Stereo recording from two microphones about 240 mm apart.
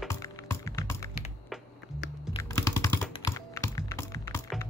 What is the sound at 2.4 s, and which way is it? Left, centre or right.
Computer keyboard, centre.